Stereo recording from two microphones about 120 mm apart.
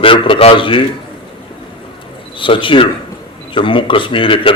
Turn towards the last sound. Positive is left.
turn(degrees=45)  # may be behind; listen again after turning